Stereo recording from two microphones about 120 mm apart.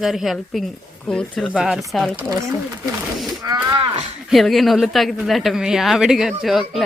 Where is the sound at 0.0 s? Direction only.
Centre (ahead or behind).